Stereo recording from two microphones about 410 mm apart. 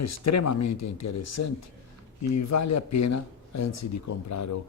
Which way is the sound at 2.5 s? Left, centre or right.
Left.